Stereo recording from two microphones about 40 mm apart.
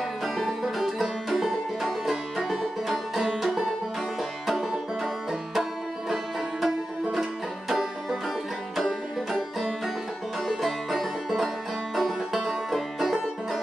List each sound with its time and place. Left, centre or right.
0.7 s music: centre
3.3 s banjo: centre
4.5 s music: centre
10.5 s music: centre